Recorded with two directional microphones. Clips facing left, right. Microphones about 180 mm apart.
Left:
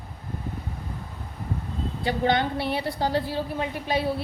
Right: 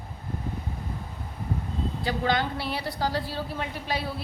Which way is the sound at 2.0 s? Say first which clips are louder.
Left 4 dB; 25° left (ahead or behind).